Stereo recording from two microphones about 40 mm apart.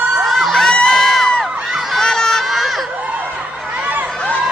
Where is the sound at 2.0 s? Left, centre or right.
Centre.